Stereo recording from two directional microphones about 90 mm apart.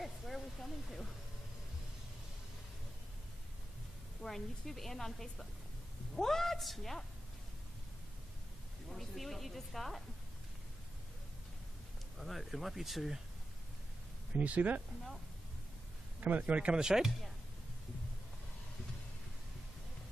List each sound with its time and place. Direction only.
0.0 s hiss: centre (ahead or behind)
4.2 s a woman's voice: 5° left (ahead or behind)
8.8 s a woman's voice: centre (ahead or behind)
12.2 s a woman's voice: centre (ahead or behind)
14.3 s speech: 15° right (ahead or behind)
16.2 s speech: 15° right (ahead or behind)